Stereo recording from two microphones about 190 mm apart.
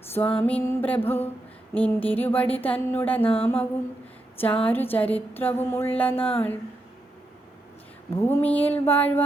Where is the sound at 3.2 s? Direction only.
30° left (ahead or behind).